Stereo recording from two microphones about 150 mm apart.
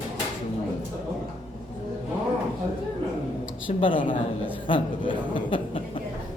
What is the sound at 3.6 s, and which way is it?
A man's voice, 35° left (ahead or behind).